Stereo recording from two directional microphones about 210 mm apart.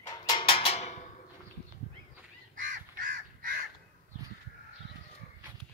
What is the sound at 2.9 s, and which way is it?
Crow, 40° right (ahead or behind).